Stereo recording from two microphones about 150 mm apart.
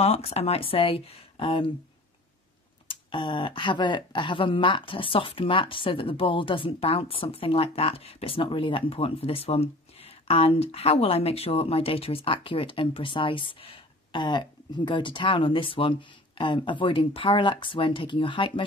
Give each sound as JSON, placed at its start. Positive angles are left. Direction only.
{"t": 0.0, "sound": "speech", "side_deg": 45}
{"t": 2.9, "sound": "speech", "side_deg": 35}